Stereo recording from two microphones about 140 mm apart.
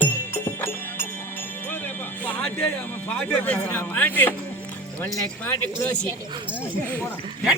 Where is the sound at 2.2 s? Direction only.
15° left (ahead or behind).